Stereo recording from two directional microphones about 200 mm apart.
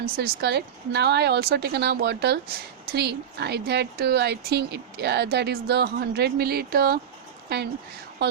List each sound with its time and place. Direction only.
0.0 s speech: 50° right (ahead or behind)